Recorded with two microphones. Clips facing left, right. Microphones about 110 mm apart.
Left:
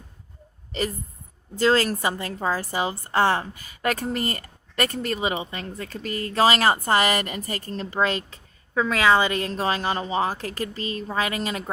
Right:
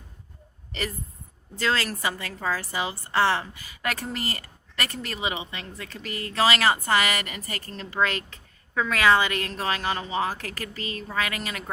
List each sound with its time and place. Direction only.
0.7 s speech: 30° left (ahead or behind)